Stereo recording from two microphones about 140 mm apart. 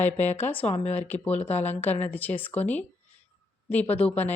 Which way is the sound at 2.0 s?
10° left (ahead or behind).